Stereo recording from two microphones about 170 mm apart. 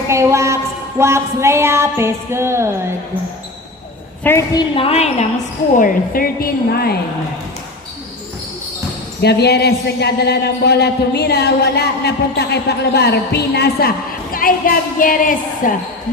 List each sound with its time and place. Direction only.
0.1 s a sound: 15° right (ahead or behind)
4.2 s a woman's voice: 15° left (ahead or behind)
4.5 s a woman's voice: 35° left (ahead or behind)
5.7 s a woman's voice: 55° left (ahead or behind)
9.2 s a man's voice: 75° left (ahead or behind)
14.3 s a woman's voice: 55° left (ahead or behind)